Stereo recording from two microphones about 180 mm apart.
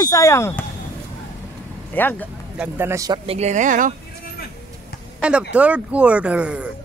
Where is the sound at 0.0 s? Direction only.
20° left (ahead or behind).